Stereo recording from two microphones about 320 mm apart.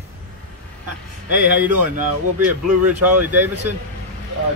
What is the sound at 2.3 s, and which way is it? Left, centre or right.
Speech, right.